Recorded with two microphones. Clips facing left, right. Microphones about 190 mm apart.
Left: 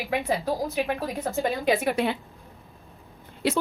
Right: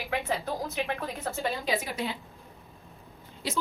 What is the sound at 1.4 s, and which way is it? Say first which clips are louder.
Speech: left 6 dB; 55° left (ahead or behind).